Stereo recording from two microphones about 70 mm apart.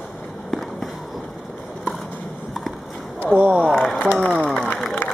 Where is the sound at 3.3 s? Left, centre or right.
Right.